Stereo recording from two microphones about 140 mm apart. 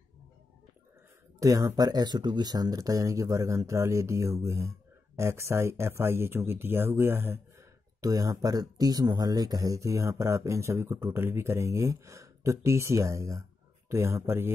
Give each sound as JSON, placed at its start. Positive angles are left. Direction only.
{"t": 1.4, "sound": "speech", "side_deg": -25}